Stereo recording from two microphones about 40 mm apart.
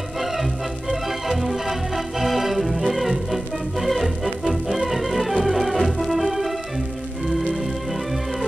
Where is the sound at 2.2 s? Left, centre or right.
Centre.